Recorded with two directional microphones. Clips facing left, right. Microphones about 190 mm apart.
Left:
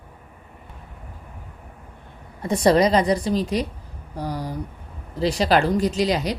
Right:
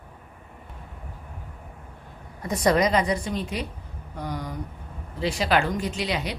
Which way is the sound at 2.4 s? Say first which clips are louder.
Left 4 dB; 30° left (ahead or behind).